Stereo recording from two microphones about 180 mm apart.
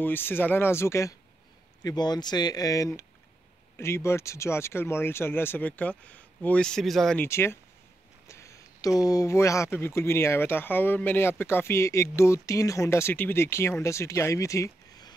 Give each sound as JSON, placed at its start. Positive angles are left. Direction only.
{"t": 0.0, "sound": "speech", "side_deg": 10}
{"t": 7.2, "sound": "speech", "side_deg": 15}
{"t": 8.3, "sound": "a sound", "side_deg": 15}
{"t": 9.0, "sound": "speech", "side_deg": 20}